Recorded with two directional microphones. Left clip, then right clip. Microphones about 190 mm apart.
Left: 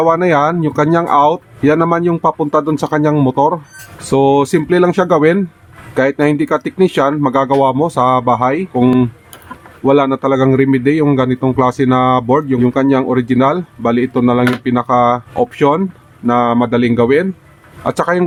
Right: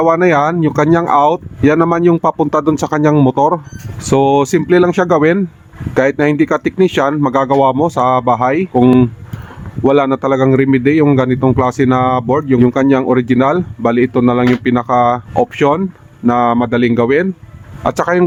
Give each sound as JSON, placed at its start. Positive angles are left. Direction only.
{"t": 0.0, "sound": "a man's voice", "side_deg": -30}
{"t": 9.8, "sound": "a man's voice", "side_deg": -35}